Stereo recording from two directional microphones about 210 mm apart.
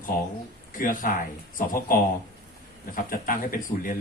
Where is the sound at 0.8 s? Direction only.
40° left (ahead or behind).